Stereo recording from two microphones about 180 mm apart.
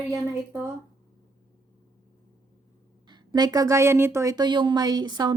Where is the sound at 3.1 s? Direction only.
25° right (ahead or behind).